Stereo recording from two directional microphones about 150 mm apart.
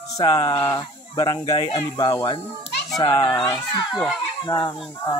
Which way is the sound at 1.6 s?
35° left (ahead or behind).